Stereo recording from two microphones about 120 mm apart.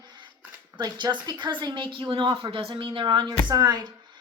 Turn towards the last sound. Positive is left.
turn(degrees=-35)  # may be behind; listen again after turning